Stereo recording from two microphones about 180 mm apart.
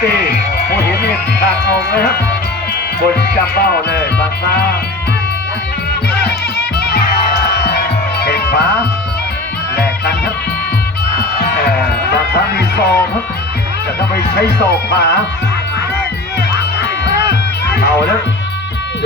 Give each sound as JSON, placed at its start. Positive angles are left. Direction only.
{"t": 0.7, "sound": "music", "side_deg": 65}
{"t": 8.2, "sound": "music", "side_deg": 60}
{"t": 12.3, "sound": "music", "side_deg": 65}
{"t": 14.3, "sound": "music", "side_deg": 65}